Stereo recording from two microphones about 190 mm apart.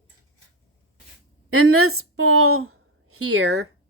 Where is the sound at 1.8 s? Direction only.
90° right.